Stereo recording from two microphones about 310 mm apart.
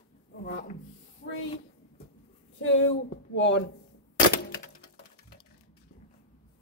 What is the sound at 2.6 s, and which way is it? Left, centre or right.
Speech, left.